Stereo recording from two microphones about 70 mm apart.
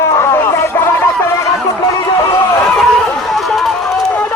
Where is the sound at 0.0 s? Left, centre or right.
Left.